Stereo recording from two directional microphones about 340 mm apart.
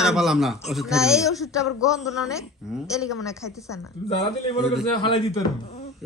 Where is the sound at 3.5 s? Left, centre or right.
Centre.